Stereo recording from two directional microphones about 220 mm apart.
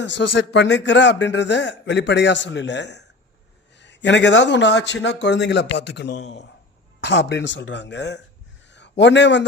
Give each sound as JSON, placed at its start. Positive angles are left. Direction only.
{"t": 0.0, "sound": "a man's voice", "side_deg": 55}